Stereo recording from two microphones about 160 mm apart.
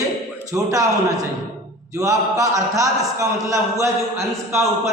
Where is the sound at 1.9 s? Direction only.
20° right (ahead or behind).